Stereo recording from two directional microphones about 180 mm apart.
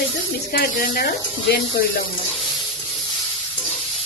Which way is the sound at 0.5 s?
55° left (ahead or behind).